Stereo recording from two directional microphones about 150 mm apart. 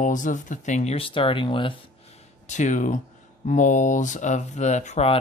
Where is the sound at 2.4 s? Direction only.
55° left (ahead or behind).